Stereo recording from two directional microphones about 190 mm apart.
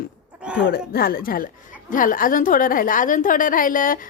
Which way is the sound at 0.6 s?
55° left (ahead or behind).